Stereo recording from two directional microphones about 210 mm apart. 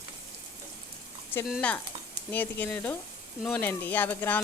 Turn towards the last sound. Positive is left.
turn(degrees=10)  # may be behind; listen again after turning